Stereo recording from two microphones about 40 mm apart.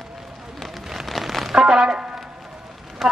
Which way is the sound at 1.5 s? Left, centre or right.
Centre.